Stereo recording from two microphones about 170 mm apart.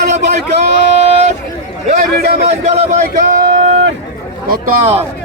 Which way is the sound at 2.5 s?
40° right (ahead or behind).